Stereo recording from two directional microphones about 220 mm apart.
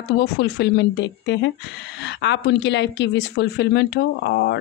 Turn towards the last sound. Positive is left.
turn(degrees=50)  # may be behind; listen again after turning